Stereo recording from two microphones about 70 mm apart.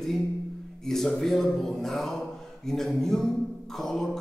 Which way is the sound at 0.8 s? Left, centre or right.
Centre.